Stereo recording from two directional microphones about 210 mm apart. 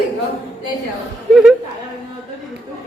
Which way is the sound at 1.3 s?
Centre (ahead or behind).